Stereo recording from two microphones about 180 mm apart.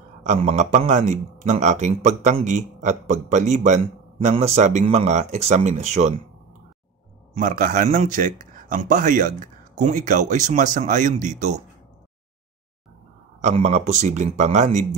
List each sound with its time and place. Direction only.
0.2 s speech: 40° right (ahead or behind)
7.3 s a man's voice: 45° right (ahead or behind)
13.4 s speech: 40° right (ahead or behind)